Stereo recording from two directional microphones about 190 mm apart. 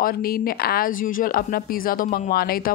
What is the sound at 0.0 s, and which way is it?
Speech, 50° left (ahead or behind).